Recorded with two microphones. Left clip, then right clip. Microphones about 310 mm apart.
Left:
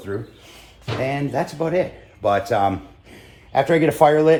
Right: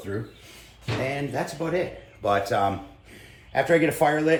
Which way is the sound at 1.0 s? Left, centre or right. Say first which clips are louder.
Left 7 dB; left.